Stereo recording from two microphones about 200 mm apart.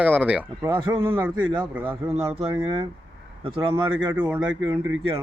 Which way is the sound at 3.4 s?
25° right (ahead or behind).